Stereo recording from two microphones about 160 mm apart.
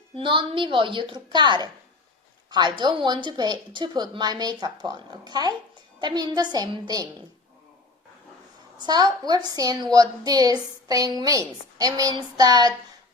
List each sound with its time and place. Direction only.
0.1 s a woman's voice: 35° right (ahead or behind)
8.8 s a woman's voice: 25° right (ahead or behind)